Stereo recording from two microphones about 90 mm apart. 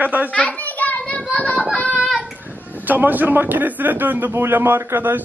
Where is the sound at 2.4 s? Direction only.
20° right (ahead or behind).